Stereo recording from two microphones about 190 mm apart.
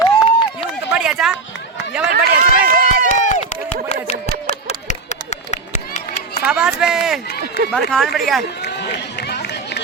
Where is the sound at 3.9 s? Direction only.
35° left (ahead or behind).